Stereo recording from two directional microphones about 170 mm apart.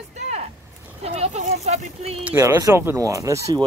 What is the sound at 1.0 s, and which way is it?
Speech, 40° right (ahead or behind).